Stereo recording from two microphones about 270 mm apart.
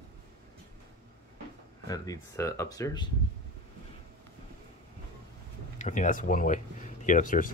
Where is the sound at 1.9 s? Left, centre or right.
Centre.